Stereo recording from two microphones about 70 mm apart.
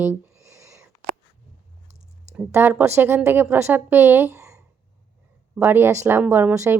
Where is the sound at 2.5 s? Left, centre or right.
Right.